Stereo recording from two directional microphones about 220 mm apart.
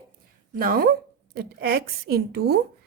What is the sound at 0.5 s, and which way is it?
A woman's voice, 40° right (ahead or behind).